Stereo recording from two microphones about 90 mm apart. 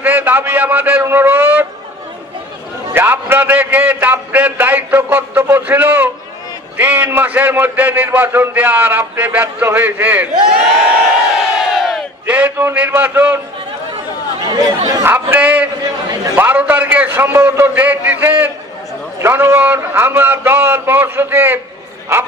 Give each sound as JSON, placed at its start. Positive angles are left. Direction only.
{"t": 0.0, "sound": "a sound", "side_deg": -20}
{"t": 2.9, "sound": "a sound", "side_deg": -25}
{"t": 6.8, "sound": "a man's voice", "side_deg": -20}
{"t": 11.7, "sound": "crowd", "side_deg": 0}
{"t": 12.3, "sound": "a man's voice", "side_deg": -15}
{"t": 14.5, "sound": "speech", "side_deg": -45}
{"t": 15.0, "sound": "a man's voice", "side_deg": -25}
{"t": 15.8, "sound": "a sound", "side_deg": -45}
{"t": 16.3, "sound": "a man's voice", "side_deg": -20}